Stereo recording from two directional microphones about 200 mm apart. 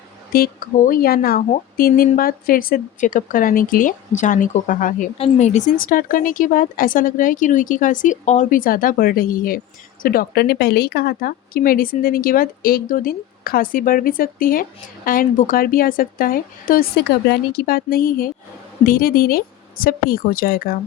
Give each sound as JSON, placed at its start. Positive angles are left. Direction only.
{"t": 0.3, "sound": "speech", "side_deg": 45}